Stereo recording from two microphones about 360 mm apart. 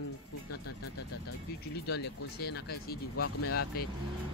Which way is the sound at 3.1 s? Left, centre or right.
Left.